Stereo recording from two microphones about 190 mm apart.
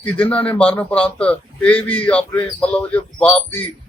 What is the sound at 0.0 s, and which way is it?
Speech, 10° left (ahead or behind).